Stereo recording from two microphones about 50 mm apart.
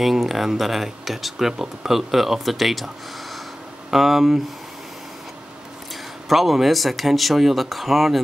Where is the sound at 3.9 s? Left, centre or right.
Centre.